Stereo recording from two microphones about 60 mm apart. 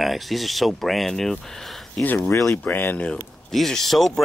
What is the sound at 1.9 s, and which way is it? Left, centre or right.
Speech, left.